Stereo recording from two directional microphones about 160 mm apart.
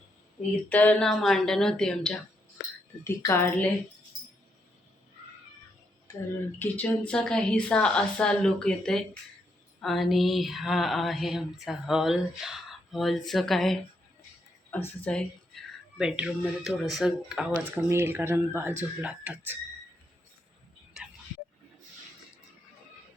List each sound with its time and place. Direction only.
0.7 s speech: 10° left (ahead or behind)
3.0 s a woman's voice: 15° left (ahead or behind)
6.6 s speech: 10° left (ahead or behind)
15.0 s speech: 5° left (ahead or behind)
16.0 s speech: 5° right (ahead or behind)
17.7 s speech: 15° right (ahead or behind)